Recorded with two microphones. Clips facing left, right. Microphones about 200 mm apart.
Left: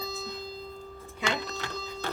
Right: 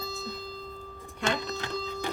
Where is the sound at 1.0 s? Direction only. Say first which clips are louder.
Right 2 dB; 15° right (ahead or behind).